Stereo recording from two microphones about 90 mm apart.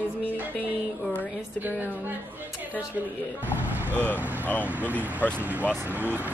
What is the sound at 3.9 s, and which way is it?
Speech, 25° left (ahead or behind).